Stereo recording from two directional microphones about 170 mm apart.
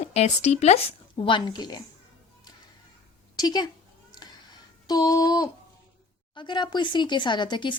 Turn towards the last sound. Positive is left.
turn(degrees=25)  # may be behind; listen again after turning